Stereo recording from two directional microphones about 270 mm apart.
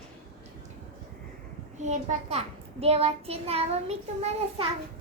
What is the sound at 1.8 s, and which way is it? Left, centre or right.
A child's voice, right.